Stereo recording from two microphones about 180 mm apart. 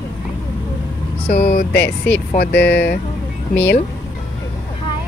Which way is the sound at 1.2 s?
40° left (ahead or behind).